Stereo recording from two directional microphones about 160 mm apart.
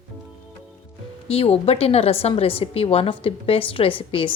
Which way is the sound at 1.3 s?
40° left (ahead or behind).